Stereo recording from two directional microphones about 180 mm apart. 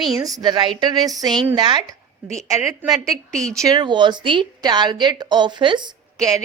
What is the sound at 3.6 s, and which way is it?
A woman's voice, 25° right (ahead or behind).